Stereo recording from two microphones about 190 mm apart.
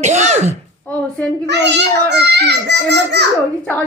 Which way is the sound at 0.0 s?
35° right (ahead or behind).